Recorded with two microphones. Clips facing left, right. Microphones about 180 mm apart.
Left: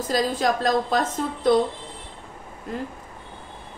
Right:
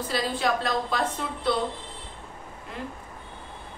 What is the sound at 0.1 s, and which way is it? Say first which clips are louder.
A woman's voice: left 4 dB; 45° left (ahead or behind).